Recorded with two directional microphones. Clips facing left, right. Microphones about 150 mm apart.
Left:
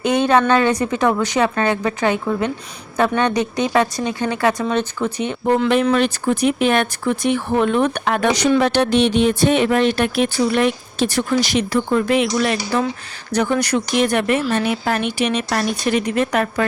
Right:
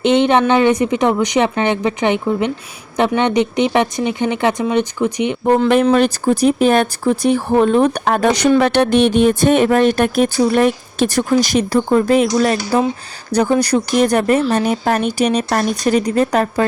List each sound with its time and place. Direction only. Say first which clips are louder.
0.0 s a woman's voice: right 3 dB; 25° right (ahead or behind)
5.5 s speech: right 3 dB; 50° right (ahead or behind)
5.8 s speech: right 4 dB; 35° right (ahead or behind)
8.3 s speech: right 3 dB; 55° right (ahead or behind); by 16.6 s 35° right (ahead or behind)